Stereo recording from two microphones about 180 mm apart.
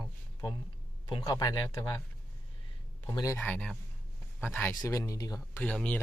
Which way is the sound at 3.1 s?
20° left (ahead or behind).